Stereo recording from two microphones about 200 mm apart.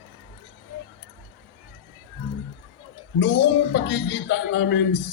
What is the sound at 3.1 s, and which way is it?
Speech, 65° left (ahead or behind).